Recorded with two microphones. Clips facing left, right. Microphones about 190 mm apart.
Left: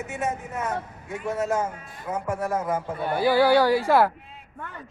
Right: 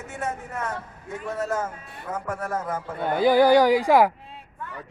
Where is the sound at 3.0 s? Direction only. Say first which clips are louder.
Right 3 dB; 20° right (ahead or behind).